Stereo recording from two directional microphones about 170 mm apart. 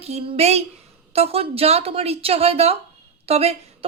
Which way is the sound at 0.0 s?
35° right (ahead or behind).